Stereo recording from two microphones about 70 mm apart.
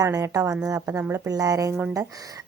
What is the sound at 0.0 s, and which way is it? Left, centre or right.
A woman's voice, right.